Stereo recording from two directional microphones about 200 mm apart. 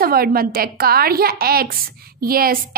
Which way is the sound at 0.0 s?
50° right (ahead or behind).